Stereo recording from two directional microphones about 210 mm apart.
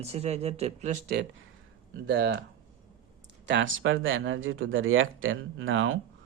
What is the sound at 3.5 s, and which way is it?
Speech, 60° right (ahead or behind).